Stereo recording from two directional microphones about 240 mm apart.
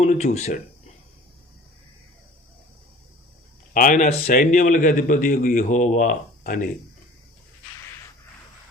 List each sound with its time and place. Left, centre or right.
0.0 s speech: left
3.8 s a man's voice: left